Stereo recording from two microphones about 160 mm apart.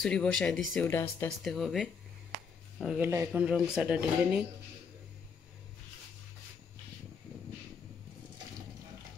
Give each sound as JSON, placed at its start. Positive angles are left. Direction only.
{"t": 0.0, "sound": "speech", "side_deg": 5}
{"t": 0.8, "sound": "speech", "side_deg": 15}
{"t": 1.4, "sound": "speech", "side_deg": 0}
{"t": 3.0, "sound": "speech", "side_deg": -15}